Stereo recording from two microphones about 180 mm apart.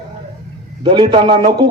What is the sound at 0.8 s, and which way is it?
Speech, 25° right (ahead or behind).